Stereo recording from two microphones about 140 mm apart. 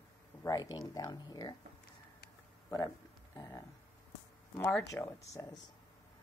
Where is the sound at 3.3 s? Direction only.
25° left (ahead or behind).